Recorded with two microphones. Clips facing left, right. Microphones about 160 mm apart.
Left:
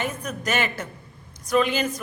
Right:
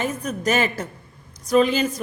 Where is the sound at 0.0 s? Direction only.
35° right (ahead or behind).